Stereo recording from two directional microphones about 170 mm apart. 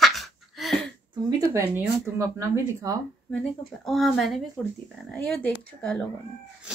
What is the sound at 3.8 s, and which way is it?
Speech, centre (ahead or behind).